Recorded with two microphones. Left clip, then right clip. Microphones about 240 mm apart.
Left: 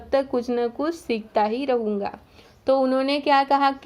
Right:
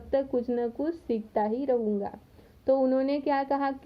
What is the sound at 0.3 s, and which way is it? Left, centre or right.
A woman's voice, centre.